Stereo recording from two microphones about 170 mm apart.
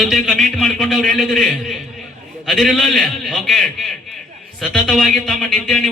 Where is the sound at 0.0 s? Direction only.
Centre (ahead or behind).